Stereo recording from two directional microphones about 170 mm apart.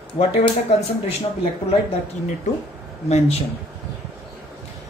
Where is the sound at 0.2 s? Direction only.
35° left (ahead or behind).